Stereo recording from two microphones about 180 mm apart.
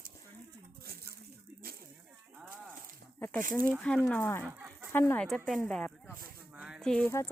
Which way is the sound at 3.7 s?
5° left (ahead or behind).